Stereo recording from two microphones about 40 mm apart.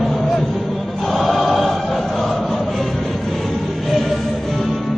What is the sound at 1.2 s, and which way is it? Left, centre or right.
Choir, centre.